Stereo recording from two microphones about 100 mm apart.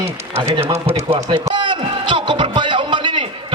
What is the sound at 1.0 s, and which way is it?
Speech, 55° right (ahead or behind).